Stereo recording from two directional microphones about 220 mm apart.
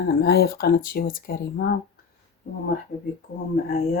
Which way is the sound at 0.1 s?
45° left (ahead or behind).